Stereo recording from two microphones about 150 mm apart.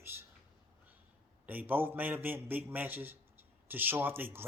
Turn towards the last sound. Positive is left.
turn(degrees=-15)  # may be behind; listen again after turning